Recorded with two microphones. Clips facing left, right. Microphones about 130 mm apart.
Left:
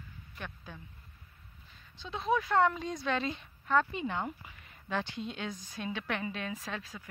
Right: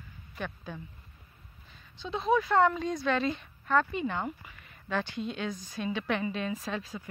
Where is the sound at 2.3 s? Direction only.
5° left (ahead or behind).